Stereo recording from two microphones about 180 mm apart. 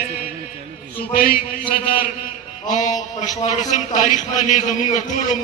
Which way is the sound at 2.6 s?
45° left (ahead or behind).